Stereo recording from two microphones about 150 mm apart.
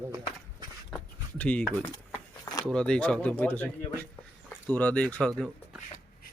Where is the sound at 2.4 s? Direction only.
25° left (ahead or behind).